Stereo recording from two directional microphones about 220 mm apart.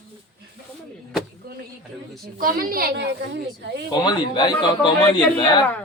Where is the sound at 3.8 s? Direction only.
20° left (ahead or behind).